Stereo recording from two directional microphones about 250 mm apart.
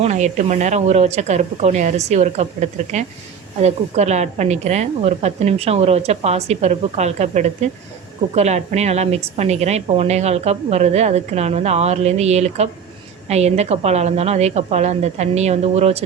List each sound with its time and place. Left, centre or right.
0.0 s a woman's voice: right